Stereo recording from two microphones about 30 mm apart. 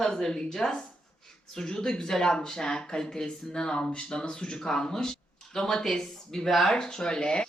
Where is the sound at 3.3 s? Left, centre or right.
Left.